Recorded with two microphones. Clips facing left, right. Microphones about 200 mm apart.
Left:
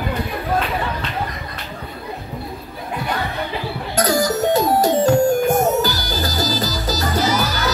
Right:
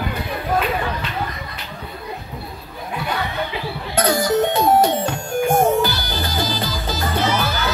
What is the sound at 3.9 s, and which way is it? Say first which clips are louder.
Music: right 1 dB; 40° left (ahead or behind).